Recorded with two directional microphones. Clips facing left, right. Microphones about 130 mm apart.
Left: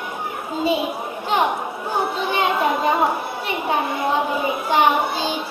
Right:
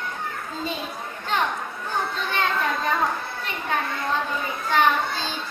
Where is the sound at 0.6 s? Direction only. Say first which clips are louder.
Left 11 dB; 10° left (ahead or behind).